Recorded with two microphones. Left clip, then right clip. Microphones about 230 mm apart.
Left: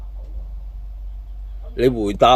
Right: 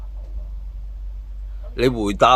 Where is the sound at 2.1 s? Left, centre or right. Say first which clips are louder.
Left 1 dB; centre.